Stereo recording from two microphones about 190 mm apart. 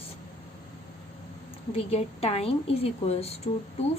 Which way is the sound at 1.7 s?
30° left (ahead or behind).